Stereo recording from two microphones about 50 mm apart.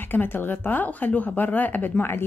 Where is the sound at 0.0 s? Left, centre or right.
Left.